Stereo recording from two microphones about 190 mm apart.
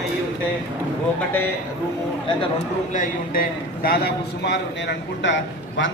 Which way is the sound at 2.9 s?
45° left (ahead or behind).